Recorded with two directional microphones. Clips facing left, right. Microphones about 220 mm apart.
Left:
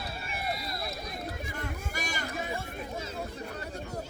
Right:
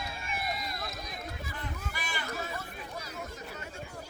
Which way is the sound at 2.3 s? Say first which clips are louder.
Left 3 dB; 20° left (ahead or behind).